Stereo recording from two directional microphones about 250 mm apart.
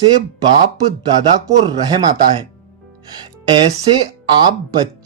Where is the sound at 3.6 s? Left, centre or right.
Right.